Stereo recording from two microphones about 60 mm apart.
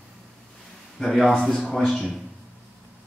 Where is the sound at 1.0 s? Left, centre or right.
Centre.